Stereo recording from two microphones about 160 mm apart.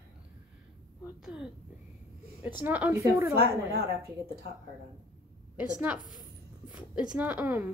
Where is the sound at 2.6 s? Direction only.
10° right (ahead or behind).